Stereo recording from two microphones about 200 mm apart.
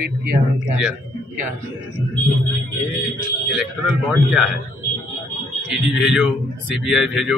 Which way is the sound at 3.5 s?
5° right (ahead or behind).